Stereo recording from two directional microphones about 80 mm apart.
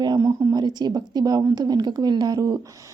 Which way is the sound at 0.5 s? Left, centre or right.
Right.